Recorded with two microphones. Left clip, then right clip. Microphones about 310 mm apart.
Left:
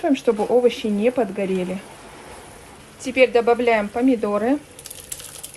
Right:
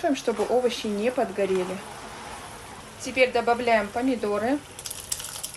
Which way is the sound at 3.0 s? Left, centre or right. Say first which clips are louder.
Left 6 dB; left.